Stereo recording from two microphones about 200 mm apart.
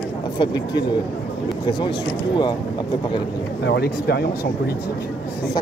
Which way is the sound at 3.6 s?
55° left (ahead or behind).